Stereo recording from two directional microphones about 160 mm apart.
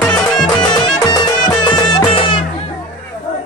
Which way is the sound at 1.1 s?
25° left (ahead or behind).